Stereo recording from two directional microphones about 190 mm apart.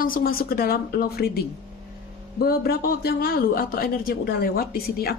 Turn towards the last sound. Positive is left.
turn(degrees=55)  # may be behind; listen again after turning